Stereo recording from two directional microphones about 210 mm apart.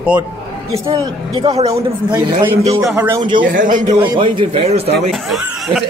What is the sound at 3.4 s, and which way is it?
Speech, 40° right (ahead or behind).